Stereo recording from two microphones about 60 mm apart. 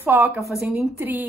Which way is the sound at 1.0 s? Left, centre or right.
Right.